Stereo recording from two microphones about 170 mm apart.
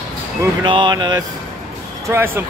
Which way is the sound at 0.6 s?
30° right (ahead or behind).